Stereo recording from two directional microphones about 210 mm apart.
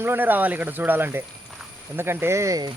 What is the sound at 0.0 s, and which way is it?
Speech, 10° right (ahead or behind).